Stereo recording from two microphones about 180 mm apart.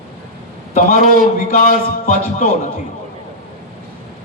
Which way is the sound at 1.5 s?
45° left (ahead or behind).